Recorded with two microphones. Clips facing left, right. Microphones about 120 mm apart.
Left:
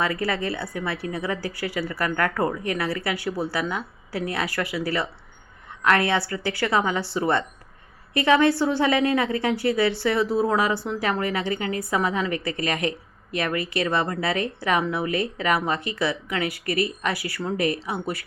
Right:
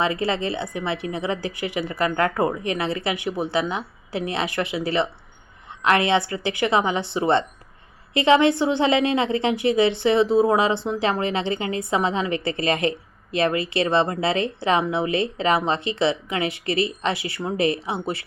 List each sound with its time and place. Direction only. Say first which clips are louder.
0.0 s speech: right 2 dB; 25° right (ahead or behind)